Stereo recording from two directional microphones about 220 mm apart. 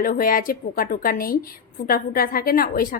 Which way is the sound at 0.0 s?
40° left (ahead or behind).